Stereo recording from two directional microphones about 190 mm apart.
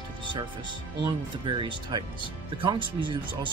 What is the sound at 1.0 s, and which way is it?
Speech, 25° right (ahead or behind).